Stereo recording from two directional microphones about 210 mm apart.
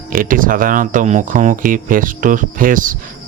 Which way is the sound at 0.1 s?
40° right (ahead or behind).